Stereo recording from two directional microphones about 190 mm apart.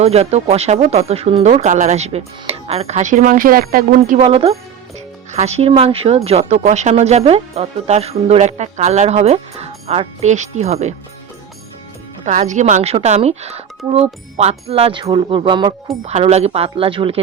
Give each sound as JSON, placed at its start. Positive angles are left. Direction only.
{"t": 0.0, "sound": "speech", "side_deg": -35}
{"t": 4.2, "sound": "speech", "side_deg": -30}
{"t": 12.2, "sound": "speech", "side_deg": -40}